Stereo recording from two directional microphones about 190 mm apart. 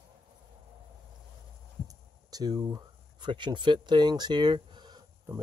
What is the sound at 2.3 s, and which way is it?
Speech, 20° right (ahead or behind).